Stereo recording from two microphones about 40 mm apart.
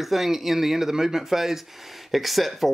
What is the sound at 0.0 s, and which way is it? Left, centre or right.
Speech, centre.